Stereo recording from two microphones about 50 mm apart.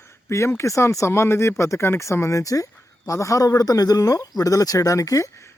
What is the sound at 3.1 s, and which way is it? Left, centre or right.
Speech, left.